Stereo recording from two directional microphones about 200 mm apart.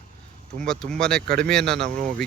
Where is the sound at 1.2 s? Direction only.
50° right (ahead or behind).